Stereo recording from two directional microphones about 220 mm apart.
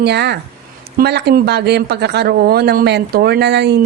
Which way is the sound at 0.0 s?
50° right (ahead or behind).